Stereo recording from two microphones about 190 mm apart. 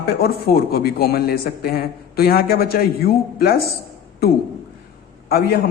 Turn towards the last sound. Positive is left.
turn(degrees=55)  # may be behind; listen again after turning